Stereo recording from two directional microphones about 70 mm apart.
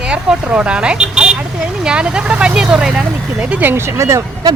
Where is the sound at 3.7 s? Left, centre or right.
Right.